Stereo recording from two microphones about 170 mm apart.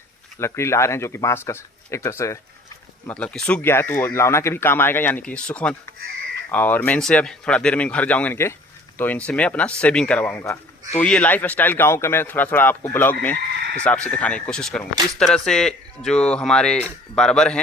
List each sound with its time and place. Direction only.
0.3 s a man's voice: 15° left (ahead or behind)